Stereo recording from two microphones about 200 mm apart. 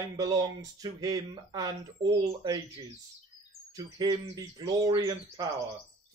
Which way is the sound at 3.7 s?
20° right (ahead or behind).